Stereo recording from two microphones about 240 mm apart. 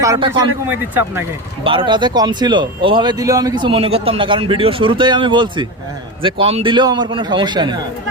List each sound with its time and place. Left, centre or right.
0.0 s speech: centre
1.6 s speech: right